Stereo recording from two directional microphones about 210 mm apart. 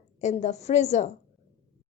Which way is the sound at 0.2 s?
35° left (ahead or behind).